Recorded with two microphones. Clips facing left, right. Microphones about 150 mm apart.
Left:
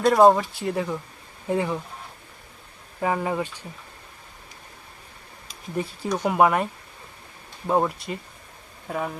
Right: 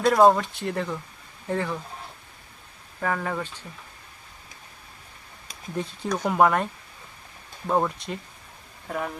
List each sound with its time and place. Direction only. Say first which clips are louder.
0.0 s speech: left 2 dB; 5° left (ahead or behind)
3.0 s speech: left 3 dB; 15° left (ahead or behind)
5.7 s speech: left 2 dB; 5° left (ahead or behind)
7.7 s speech: left 2 dB; 5° left (ahead or behind)